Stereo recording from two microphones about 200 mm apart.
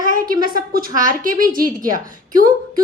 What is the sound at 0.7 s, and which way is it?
A woman's voice, 45° right (ahead or behind).